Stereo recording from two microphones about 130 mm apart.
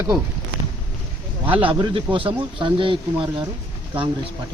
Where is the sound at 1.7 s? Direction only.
40° right (ahead or behind).